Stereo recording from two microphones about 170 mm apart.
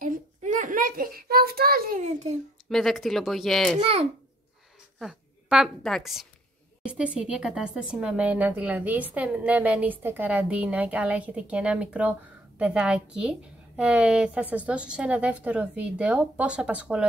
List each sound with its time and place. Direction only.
0.0 s child singing: 50° right (ahead or behind)
2.7 s speech: centre (ahead or behind)
3.8 s a child's voice: 35° right (ahead or behind)
4.9 s a woman's voice: centre (ahead or behind)